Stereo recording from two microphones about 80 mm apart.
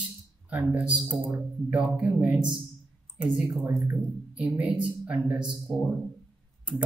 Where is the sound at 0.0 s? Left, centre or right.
Centre.